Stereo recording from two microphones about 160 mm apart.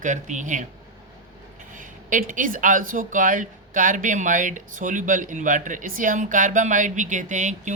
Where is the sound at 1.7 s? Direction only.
55° right (ahead or behind).